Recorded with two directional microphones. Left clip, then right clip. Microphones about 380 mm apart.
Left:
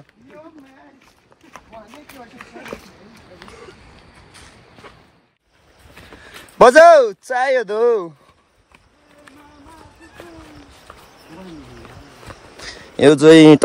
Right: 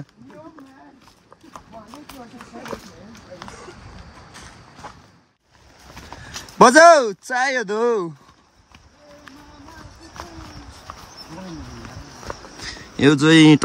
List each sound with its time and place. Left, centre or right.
1.5 s speech: centre
6.6 s speech: centre
12.5 s a sound: centre